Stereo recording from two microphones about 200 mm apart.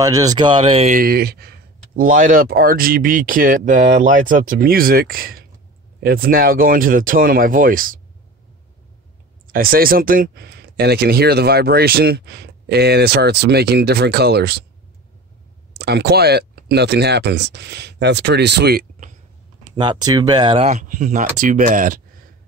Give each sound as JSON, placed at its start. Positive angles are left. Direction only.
{"t": 0.0, "sound": "speech", "side_deg": -15}
{"t": 0.6, "sound": "speech", "side_deg": -30}
{"t": 0.9, "sound": "speech", "side_deg": -50}
{"t": 9.5, "sound": "speech", "side_deg": -45}
{"t": 15.8, "sound": "speech", "side_deg": -55}
{"t": 19.7, "sound": "speech", "side_deg": -20}